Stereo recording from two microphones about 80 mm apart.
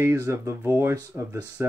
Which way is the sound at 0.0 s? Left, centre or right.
Right.